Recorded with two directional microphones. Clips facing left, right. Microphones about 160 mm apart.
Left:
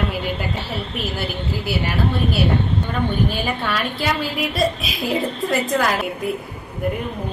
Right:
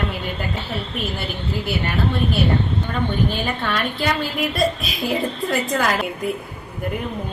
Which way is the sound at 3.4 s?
5° left (ahead or behind).